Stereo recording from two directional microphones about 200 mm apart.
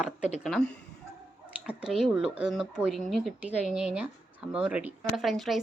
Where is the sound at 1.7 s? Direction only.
5° right (ahead or behind).